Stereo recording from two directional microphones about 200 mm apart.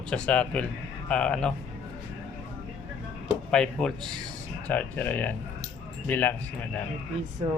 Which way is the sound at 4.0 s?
20° right (ahead or behind).